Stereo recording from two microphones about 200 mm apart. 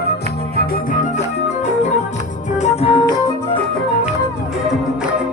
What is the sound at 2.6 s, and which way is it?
Music, 35° left (ahead or behind).